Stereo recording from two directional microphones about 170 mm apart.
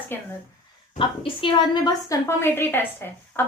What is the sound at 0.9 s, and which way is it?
A woman's voice, 30° left (ahead or behind).